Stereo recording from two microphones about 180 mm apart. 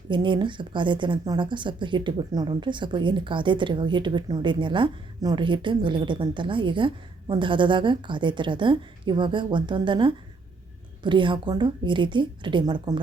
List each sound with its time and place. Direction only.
0.1 s speech: 25° right (ahead or behind)